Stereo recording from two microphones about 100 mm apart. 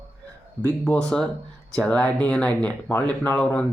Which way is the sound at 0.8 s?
10° left (ahead or behind).